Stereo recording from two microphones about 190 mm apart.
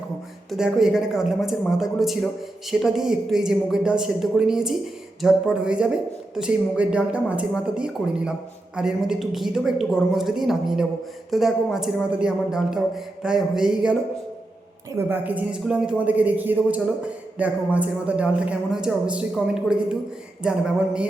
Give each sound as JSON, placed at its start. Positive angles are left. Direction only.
{"t": 0.5, "sound": "a woman's voice", "side_deg": -5}